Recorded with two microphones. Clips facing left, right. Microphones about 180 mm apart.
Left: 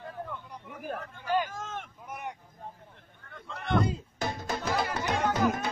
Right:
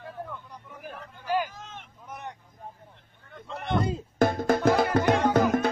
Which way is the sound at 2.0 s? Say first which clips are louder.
Right 1 dB; 10° left (ahead or behind).